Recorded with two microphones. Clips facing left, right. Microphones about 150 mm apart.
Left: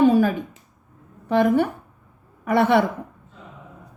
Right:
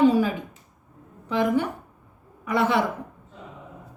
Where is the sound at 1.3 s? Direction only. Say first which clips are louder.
Left 5 dB; 55° left (ahead or behind).